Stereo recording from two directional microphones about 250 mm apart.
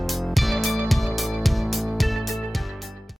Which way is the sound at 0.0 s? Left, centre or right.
Centre.